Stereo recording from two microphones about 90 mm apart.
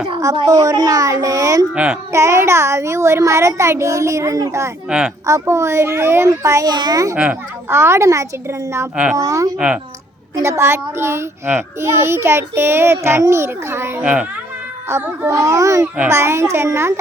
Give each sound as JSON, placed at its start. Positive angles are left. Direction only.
{"t": 0.4, "sound": "a child's voice", "side_deg": -40}
{"t": 1.7, "sound": "a child's voice", "side_deg": -15}
{"t": 2.1, "sound": "a child's voice", "side_deg": -35}
{"t": 4.9, "sound": "a child's voice", "side_deg": -15}
{"t": 5.2, "sound": "a child's voice", "side_deg": -35}
{"t": 6.7, "sound": "a child's voice", "side_deg": -50}
{"t": 7.2, "sound": "a child's voice", "side_deg": -15}
{"t": 7.8, "sound": "a child's voice", "side_deg": -30}
{"t": 9.6, "sound": "a child's voice", "side_deg": -10}
{"t": 10.4, "sound": "a child's voice", "side_deg": -30}
{"t": 14.0, "sound": "a child's voice", "side_deg": -15}
{"t": 15.3, "sound": "a child's voice", "side_deg": -35}